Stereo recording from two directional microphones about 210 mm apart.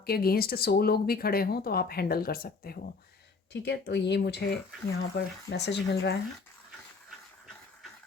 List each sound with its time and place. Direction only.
0.0 s speech: 45° left (ahead or behind)